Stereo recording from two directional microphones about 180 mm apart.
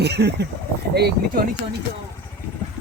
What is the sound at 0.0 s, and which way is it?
Speech, 65° right (ahead or behind).